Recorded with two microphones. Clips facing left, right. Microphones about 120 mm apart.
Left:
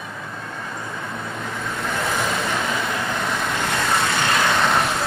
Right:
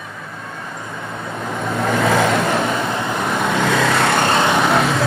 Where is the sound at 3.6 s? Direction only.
90° right.